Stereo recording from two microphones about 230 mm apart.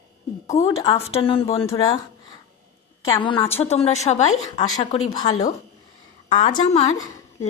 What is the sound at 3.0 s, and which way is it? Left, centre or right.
A woman's voice, centre.